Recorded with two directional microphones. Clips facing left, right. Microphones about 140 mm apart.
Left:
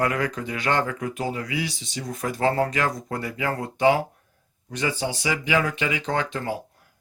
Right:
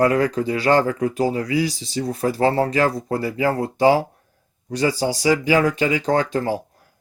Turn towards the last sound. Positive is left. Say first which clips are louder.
# right 7 dB
turn(degrees=-35)  # may be behind; listen again after turning